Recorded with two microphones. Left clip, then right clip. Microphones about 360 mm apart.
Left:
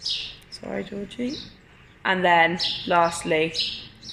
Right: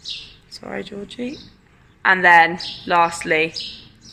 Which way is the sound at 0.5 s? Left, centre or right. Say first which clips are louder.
Right 3 dB; right.